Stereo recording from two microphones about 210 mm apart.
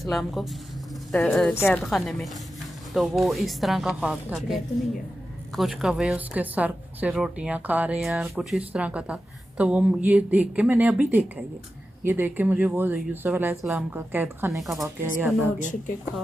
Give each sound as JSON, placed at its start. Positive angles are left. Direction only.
{"t": 0.0, "sound": "a woman's voice", "side_deg": 0}
{"t": 5.6, "sound": "speech", "side_deg": 0}
{"t": 14.6, "sound": "a woman's voice", "side_deg": 0}
{"t": 15.6, "sound": "speech", "side_deg": 35}